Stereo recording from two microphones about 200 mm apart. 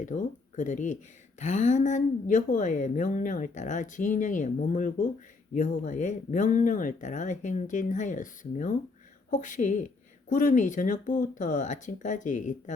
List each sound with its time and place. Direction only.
0.0 s a woman's voice: 40° left (ahead or behind)